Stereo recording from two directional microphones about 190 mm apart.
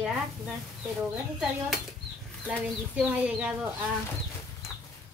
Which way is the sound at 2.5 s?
5° right (ahead or behind).